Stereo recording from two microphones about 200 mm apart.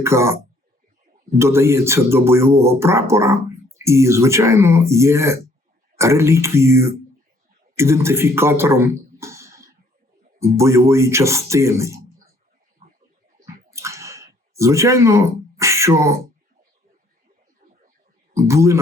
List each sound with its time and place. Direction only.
0.0 s speech: 15° right (ahead or behind)
1.4 s speech: 15° right (ahead or behind)
9.2 s a sound: 15° right (ahead or behind)
10.6 s speech: 15° right (ahead or behind)
13.7 s a sound: 15° right (ahead or behind)
18.3 s a man's voice: 15° right (ahead or behind)